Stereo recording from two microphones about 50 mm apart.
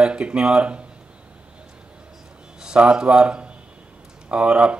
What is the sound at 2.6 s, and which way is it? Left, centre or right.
A man's voice, centre.